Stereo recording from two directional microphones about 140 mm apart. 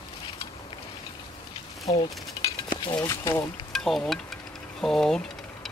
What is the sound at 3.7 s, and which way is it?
Wind chime, 5° left (ahead or behind).